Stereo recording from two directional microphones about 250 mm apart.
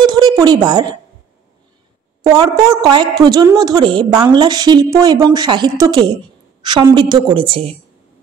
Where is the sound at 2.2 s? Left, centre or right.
Centre.